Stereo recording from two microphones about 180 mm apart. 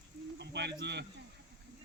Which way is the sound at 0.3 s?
70° right (ahead or behind).